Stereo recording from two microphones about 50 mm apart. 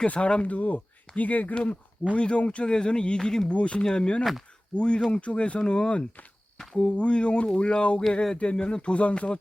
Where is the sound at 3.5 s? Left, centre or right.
Left.